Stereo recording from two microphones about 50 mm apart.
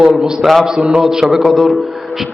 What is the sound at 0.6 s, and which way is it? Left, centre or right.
A man's voice, centre.